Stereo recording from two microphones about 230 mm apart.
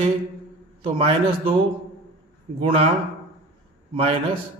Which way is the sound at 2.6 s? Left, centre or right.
Right.